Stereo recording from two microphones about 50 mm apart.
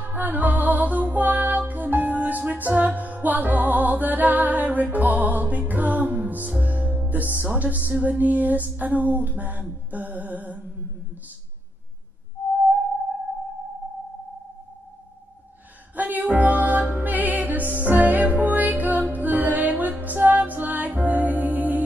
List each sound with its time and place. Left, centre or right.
0.0 s music: right
16.0 s music: right